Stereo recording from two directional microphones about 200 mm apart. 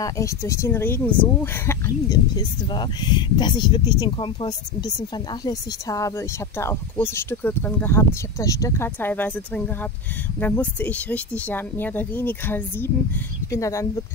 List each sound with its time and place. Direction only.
0.0 s speech: 15° left (ahead or behind)